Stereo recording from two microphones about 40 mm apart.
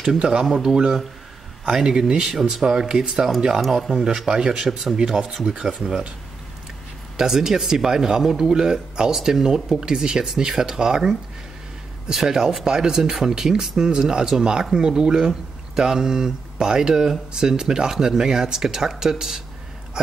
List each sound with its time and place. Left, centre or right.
0.2 s speech: centre
4.3 s speech: centre
4.6 s speech: centre
4.9 s speech: centre
7.2 s speech: centre